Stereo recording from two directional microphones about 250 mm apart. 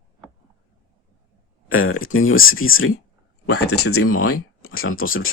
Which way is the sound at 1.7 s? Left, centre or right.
Left.